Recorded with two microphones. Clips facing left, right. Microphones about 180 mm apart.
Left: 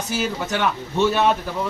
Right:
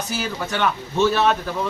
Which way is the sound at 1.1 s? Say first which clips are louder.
Even; 15° left (ahead or behind).